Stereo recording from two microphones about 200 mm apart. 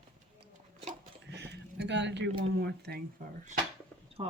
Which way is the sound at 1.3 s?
60° right (ahead or behind).